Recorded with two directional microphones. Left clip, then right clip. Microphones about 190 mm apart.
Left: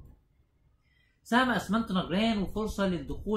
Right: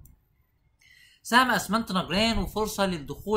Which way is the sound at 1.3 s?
15° right (ahead or behind).